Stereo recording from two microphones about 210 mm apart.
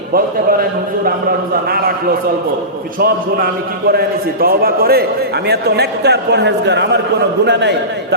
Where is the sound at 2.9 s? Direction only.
45° right (ahead or behind).